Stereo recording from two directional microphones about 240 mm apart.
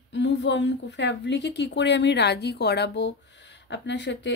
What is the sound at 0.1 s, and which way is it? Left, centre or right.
A woman's voice, left.